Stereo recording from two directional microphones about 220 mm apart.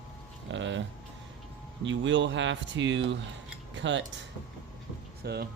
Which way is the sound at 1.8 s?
55° right (ahead or behind).